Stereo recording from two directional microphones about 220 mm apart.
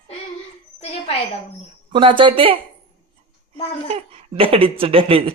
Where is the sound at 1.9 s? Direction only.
25° right (ahead or behind).